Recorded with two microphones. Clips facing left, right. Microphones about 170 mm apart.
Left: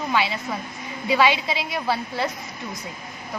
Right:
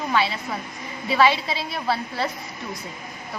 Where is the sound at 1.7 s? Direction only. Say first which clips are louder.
Even; centre (ahead or behind).